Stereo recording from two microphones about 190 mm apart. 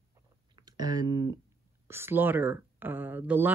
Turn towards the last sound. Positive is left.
turn(degrees=-10)  # may be behind; listen again after turning